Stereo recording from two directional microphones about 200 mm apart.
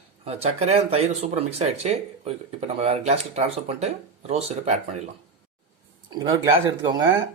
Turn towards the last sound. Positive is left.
turn(degrees=-20)  # may be behind; listen again after turning